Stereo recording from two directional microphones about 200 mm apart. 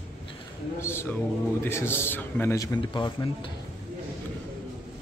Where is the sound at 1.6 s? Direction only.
10° left (ahead or behind).